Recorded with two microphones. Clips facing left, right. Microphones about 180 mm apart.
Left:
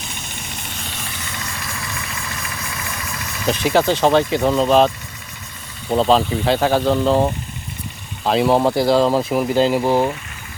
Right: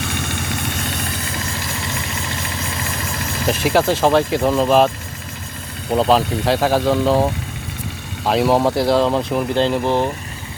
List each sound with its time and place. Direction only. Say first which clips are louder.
0.0 s vehicle: right 9 dB; 70° right (ahead or behind)
1.3 s vehicle: right 4 dB; 30° right (ahead or behind)
3.4 s speech: even; centre (ahead or behind)
5.9 s speech: even; 5° right (ahead or behind)